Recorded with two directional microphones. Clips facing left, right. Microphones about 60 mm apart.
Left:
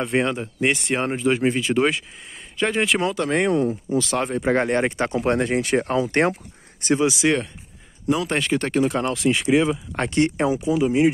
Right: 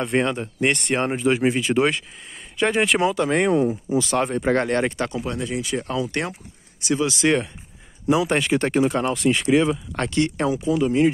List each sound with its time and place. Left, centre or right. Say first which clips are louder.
0.0 s speech: even; centre
4.6 s speech: left 1 dB; centre
5.2 s speech: left 6 dB; left
7.2 s speech: right 1 dB; centre
8.9 s speech: right 1 dB; centre
9.9 s speech: left 3 dB; left; by 11.1 s centre